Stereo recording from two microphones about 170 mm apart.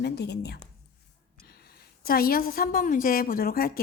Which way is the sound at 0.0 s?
75° left (ahead or behind).